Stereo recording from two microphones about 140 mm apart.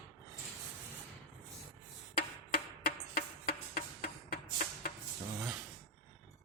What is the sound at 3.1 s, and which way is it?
Music, 90° left.